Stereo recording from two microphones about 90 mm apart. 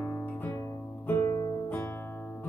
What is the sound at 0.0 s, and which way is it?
Music, 20° left (ahead or behind).